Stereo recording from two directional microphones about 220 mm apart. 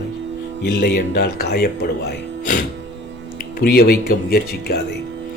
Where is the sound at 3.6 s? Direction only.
45° left (ahead or behind).